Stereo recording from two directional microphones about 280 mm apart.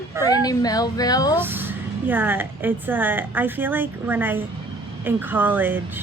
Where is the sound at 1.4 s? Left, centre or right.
Centre.